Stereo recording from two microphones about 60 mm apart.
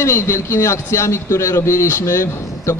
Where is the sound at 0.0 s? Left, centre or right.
Left.